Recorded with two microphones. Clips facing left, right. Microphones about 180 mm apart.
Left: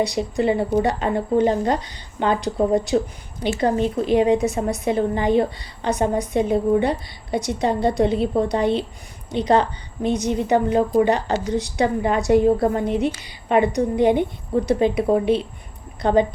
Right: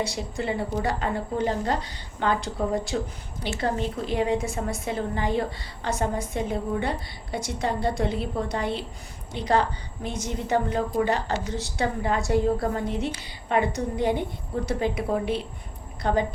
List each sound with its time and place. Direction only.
0.0 s a woman's voice: 20° left (ahead or behind)